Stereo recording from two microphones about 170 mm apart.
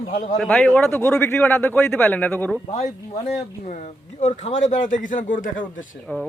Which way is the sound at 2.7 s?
45° left (ahead or behind).